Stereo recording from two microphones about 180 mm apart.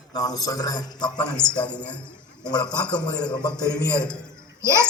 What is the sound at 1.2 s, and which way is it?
A man's voice, 5° left (ahead or behind).